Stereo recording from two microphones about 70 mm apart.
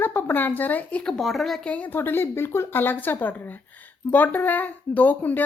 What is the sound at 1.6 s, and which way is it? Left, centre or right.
A woman's voice, left.